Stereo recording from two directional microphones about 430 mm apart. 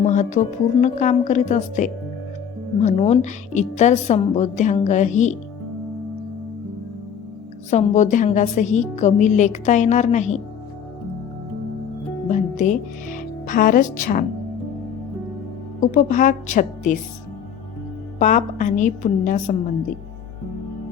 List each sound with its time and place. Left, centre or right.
0.0 s music: centre
0.8 s a woman's voice: centre
7.7 s a woman's voice: centre
12.3 s a woman's voice: centre
15.8 s a woman's voice: centre
18.2 s a woman's voice: centre